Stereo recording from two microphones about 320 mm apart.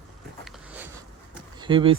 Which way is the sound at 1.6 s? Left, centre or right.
Centre.